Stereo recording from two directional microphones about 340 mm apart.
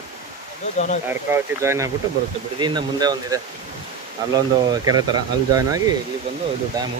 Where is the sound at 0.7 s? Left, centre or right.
Left.